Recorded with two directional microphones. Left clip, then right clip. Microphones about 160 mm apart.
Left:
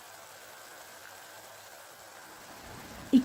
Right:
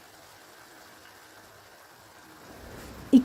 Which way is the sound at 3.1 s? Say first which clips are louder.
Right 5 dB; 25° right (ahead or behind).